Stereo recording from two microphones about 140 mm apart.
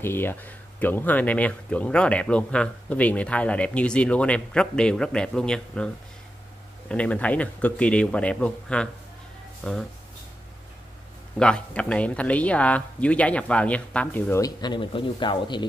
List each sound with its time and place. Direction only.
0.0 s speech: 15° left (ahead or behind)
6.9 s speech: 10° left (ahead or behind)
11.3 s speech: 5° left (ahead or behind)
14.4 s speech: 30° left (ahead or behind)